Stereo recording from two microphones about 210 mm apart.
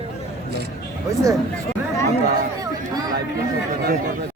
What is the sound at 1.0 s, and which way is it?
Speech, 15° right (ahead or behind).